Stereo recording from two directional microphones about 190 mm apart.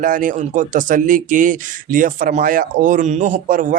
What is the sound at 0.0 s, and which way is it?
Speech, 45° right (ahead or behind).